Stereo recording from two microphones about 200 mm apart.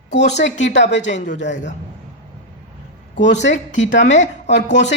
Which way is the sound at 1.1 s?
35° left (ahead or behind).